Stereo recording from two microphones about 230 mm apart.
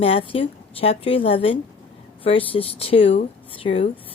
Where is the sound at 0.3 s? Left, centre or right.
Left.